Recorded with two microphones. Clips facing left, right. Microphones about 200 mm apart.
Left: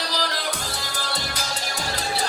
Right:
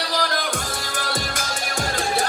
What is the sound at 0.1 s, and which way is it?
Music, 50° right (ahead or behind).